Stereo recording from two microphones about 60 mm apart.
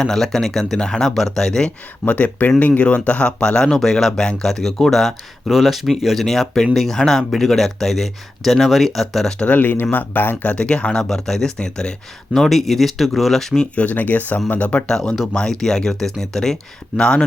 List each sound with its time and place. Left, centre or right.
0.0 s speech: centre
2.0 s speech: left; by 9.3 s centre
9.4 s speech: left
10.5 s speech: centre
13.7 s speech: left
14.9 s speech: centre